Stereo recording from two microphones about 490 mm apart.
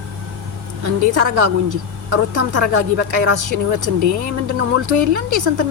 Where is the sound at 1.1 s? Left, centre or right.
Right.